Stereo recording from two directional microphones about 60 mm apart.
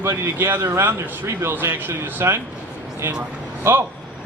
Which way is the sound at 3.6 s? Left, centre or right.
Right.